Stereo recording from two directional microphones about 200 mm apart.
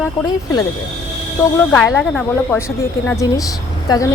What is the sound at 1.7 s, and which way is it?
Speech, 5° left (ahead or behind).